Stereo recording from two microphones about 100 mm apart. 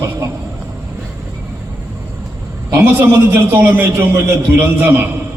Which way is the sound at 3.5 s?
20° right (ahead or behind).